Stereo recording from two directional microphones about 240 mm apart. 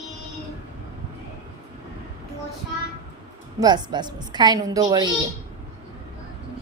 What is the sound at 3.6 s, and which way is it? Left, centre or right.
A woman's voice, centre.